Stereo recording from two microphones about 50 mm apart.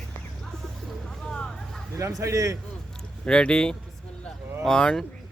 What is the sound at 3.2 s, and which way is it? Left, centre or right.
Speech, centre.